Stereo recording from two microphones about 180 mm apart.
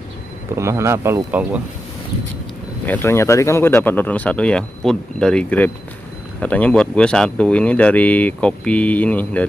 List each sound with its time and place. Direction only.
0.6 s speech: 15° right (ahead or behind)
2.9 s speech: 15° left (ahead or behind)